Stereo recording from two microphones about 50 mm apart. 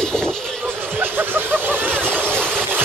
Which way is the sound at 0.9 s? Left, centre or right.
Right.